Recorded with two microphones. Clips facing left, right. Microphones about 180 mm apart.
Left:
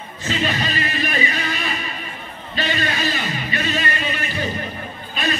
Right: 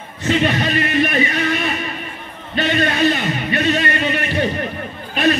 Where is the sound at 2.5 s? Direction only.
60° right (ahead or behind).